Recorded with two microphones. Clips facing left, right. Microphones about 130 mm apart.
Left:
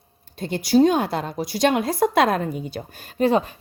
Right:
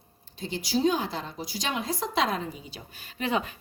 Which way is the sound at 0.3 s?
60° left (ahead or behind).